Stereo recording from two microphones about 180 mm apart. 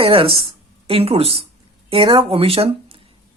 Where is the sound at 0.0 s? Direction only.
30° right (ahead or behind).